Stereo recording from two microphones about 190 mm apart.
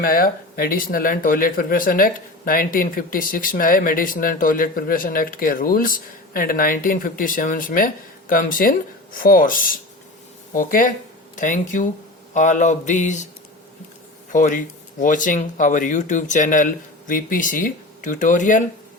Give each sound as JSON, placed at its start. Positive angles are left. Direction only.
{"t": 0.0, "sound": "speech", "side_deg": 50}
{"t": 11.3, "sound": "mantra", "side_deg": 40}
{"t": 14.3, "sound": "speech", "side_deg": 45}